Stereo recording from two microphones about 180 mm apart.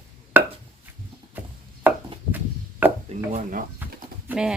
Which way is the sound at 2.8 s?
10° right (ahead or behind).